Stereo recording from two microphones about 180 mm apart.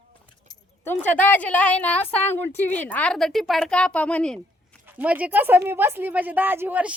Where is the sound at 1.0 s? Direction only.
10° left (ahead or behind).